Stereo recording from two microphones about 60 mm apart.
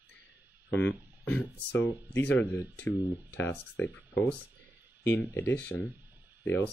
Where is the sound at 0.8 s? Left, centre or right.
Left.